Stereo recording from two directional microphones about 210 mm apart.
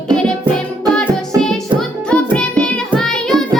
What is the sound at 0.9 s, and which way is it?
Music, 5° left (ahead or behind).